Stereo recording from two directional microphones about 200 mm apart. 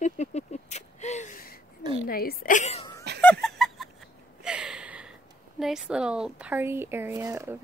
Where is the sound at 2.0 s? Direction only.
45° left (ahead or behind).